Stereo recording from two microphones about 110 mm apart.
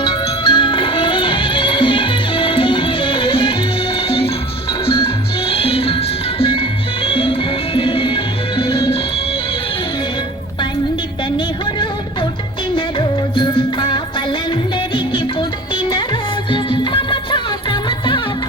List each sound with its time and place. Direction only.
0.0 s music: 50° left (ahead or behind)
11.3 s music: 45° left (ahead or behind)